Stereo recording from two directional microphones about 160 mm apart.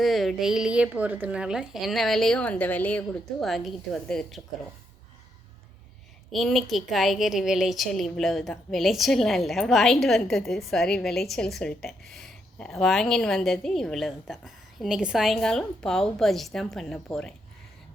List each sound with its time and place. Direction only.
0.0 s a woman's voice: centre (ahead or behind)
6.3 s a woman's voice: centre (ahead or behind)